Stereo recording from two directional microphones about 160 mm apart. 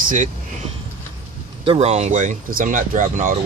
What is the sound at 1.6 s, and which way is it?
Speech, 40° right (ahead or behind).